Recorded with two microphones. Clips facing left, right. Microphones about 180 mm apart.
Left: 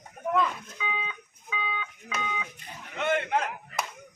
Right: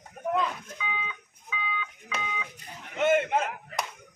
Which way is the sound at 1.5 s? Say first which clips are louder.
Left 1 dB; 35° left (ahead or behind).